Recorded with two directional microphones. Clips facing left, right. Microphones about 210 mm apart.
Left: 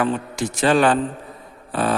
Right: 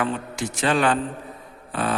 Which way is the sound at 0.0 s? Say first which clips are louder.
Left 4 dB; 40° left (ahead or behind).